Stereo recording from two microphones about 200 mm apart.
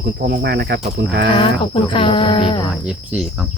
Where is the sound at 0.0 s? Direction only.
55° right (ahead or behind).